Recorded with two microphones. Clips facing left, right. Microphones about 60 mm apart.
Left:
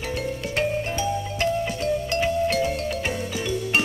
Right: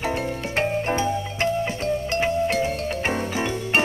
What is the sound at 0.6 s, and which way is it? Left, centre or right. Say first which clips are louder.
Music: right 3 dB; right.